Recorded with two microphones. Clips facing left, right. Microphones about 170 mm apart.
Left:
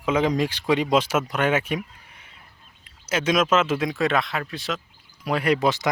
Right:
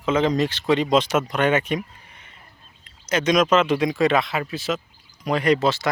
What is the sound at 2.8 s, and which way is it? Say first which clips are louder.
Speech: right 2 dB; 5° left (ahead or behind).